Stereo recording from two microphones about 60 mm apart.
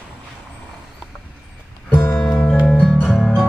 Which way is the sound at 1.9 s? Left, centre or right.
Left.